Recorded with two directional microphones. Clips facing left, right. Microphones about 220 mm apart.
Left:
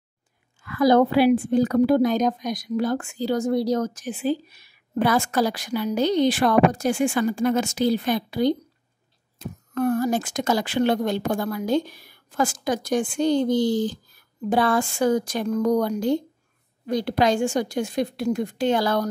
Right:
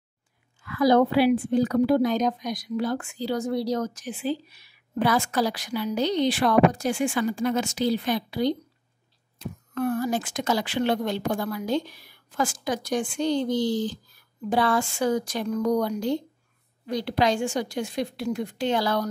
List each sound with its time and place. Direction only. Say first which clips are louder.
0.6 s a woman's voice: left 2 dB; 50° left (ahead or behind)